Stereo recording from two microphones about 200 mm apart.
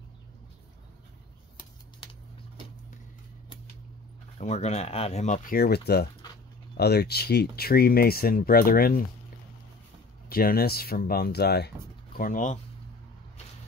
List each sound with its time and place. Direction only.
4.4 s speech: 35° left (ahead or behind)
10.3 s speech: 50° left (ahead or behind)
12.2 s speech: 40° left (ahead or behind)